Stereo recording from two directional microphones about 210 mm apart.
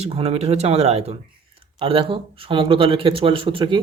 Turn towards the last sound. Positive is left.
turn(degrees=-25)  # may be behind; listen again after turning